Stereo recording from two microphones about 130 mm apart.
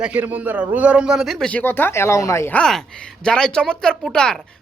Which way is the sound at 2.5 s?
5° left (ahead or behind).